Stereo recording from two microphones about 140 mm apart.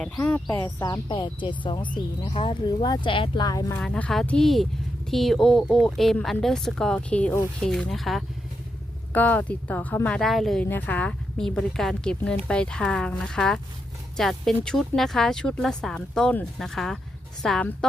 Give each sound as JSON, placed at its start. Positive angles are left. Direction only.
{"t": 0.0, "sound": "a woman's voice", "side_deg": 10}
{"t": 0.8, "sound": "speech", "side_deg": 30}
{"t": 3.8, "sound": "speech", "side_deg": 5}
{"t": 9.1, "sound": "a woman's voice", "side_deg": 10}